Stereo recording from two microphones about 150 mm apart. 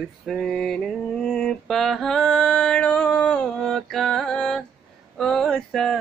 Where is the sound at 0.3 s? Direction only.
Centre (ahead or behind).